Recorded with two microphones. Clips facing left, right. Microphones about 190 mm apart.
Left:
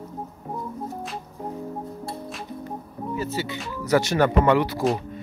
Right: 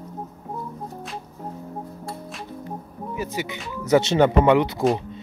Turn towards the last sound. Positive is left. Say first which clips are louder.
# right 2 dB
turn(degrees=-20)  # may be behind; listen again after turning